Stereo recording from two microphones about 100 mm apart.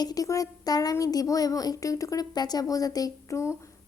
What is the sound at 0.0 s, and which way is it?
Speech, 40° left (ahead or behind).